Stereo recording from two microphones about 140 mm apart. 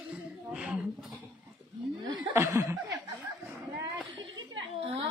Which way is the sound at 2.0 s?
20° right (ahead or behind).